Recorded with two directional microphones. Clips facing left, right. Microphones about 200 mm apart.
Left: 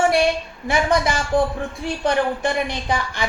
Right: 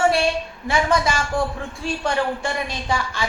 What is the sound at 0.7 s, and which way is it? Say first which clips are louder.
A man's voice: left 1 dB; 20° left (ahead or behind).